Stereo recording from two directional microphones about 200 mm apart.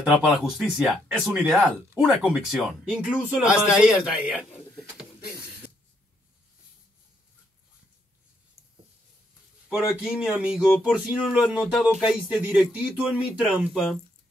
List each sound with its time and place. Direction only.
0.0 s speech: centre (ahead or behind)
9.7 s speech: 5° right (ahead or behind)